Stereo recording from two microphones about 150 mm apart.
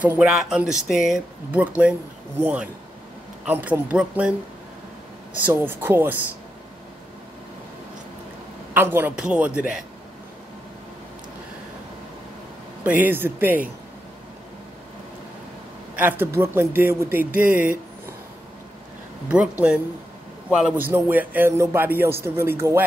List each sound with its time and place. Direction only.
0.0 s speech: 10° right (ahead or behind)
5.4 s speech: 15° right (ahead or behind)
8.7 s speech: 15° right (ahead or behind)
12.8 s speech: 10° right (ahead or behind)
16.0 s speech: 15° right (ahead or behind)
19.2 s speech: 10° right (ahead or behind)